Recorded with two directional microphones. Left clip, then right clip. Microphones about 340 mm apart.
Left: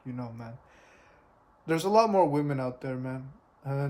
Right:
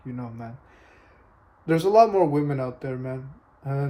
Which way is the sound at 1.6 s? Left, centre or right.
Centre.